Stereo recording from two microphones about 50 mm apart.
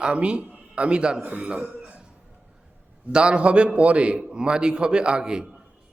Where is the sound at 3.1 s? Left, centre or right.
Centre.